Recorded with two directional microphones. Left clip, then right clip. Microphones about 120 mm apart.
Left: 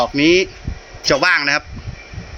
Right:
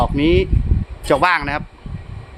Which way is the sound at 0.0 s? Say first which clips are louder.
Left 3 dB; 15° right (ahead or behind).